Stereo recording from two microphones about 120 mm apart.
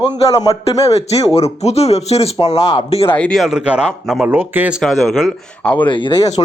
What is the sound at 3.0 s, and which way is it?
Speech, 15° left (ahead or behind).